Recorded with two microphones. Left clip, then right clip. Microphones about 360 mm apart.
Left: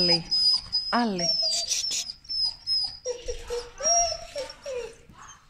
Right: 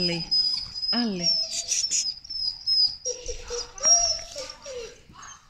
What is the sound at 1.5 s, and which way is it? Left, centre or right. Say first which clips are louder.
Bird: left 1 dB; centre.